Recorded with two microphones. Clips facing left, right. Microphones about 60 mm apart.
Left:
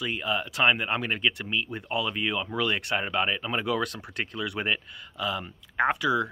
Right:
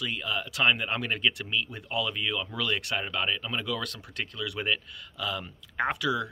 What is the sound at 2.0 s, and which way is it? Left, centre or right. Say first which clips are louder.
Speech: left 2 dB; left.